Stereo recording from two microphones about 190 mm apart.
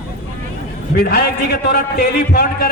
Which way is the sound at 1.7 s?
55° left (ahead or behind).